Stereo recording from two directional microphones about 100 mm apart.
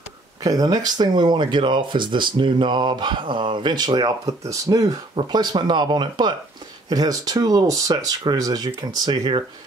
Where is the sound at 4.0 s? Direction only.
35° right (ahead or behind).